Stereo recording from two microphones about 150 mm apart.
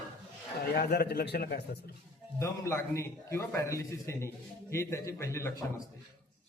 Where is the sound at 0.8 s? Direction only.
90° left.